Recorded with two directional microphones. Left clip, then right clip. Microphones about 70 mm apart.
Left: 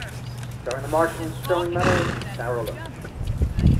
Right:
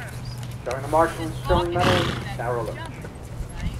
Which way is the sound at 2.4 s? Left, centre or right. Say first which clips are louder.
Even; right.